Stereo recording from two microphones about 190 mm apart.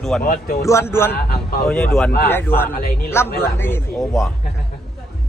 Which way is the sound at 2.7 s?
55° left (ahead or behind).